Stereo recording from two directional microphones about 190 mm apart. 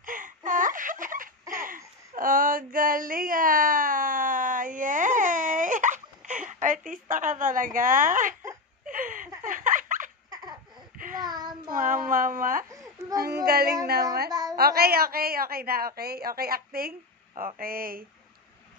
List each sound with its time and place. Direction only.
0.0 s a sound: 45° right (ahead or behind)
9.4 s giggle: 45° right (ahead or behind)
11.0 s child singing: 45° right (ahead or behind)
11.2 s child singing: 20° right (ahead or behind)
11.7 s a woman's voice: 45° right (ahead or behind)
14.3 s a sound: 20° right (ahead or behind)
14.6 s a woman's voice: 55° right (ahead or behind)